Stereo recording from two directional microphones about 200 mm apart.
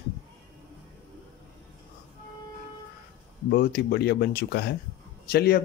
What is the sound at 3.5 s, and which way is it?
Speech, 55° left (ahead or behind).